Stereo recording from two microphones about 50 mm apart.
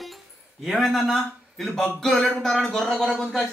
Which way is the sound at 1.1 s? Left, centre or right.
Centre.